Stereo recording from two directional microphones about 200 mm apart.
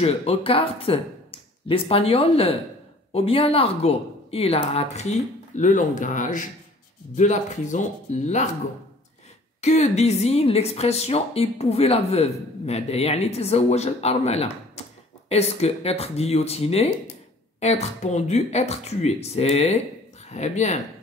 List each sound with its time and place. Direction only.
0.0 s a woman's voice: 30° left (ahead or behind)
9.6 s a woman's voice: 35° left (ahead or behind)
14.8 s a sound: 30° left (ahead or behind)
15.2 s a woman's voice: 30° left (ahead or behind)